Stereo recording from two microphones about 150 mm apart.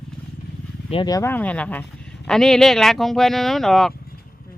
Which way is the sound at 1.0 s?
25° left (ahead or behind).